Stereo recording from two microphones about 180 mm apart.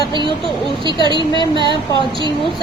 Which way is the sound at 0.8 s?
25° right (ahead or behind).